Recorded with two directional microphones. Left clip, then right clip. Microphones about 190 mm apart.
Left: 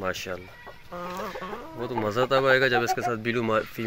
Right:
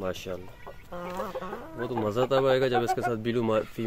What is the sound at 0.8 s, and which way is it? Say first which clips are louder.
Chicken: left 1 dB; 35° left (ahead or behind).